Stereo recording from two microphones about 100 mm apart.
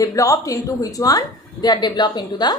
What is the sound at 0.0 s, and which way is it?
A woman's voice, 35° left (ahead or behind).